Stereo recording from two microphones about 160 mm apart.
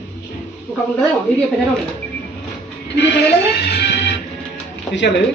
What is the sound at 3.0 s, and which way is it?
Music, 90° left.